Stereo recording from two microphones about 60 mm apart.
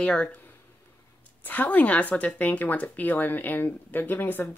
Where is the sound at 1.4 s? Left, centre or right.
Left.